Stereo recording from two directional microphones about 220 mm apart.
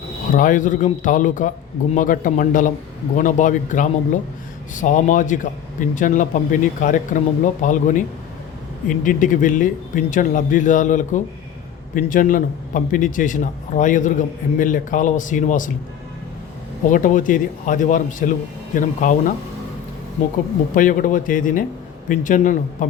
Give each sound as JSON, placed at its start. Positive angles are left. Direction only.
{"t": 0.3, "sound": "a man's voice", "side_deg": 35}
{"t": 16.9, "sound": "a man's voice", "side_deg": 35}
{"t": 20.7, "sound": "a man's voice", "side_deg": 35}